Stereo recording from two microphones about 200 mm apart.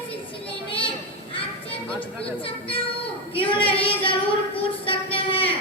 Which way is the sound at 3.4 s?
25° left (ahead or behind).